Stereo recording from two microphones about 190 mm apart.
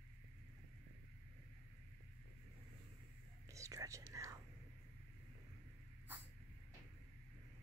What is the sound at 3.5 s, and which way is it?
Whispering, 15° right (ahead or behind).